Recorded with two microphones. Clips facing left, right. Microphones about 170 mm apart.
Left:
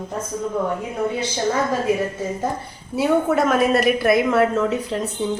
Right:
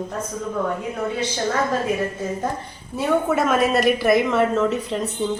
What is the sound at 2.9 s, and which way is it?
A woman's voice, centre (ahead or behind).